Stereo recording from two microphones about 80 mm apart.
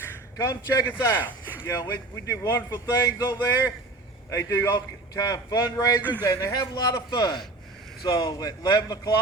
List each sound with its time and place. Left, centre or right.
0.3 s a man's voice: left
0.9 s a man's voice: left
2.9 s a man's voice: left
4.5 s a man's voice: left
5.1 s a man's voice: left
6.0 s speech: right
6.2 s a man's voice: left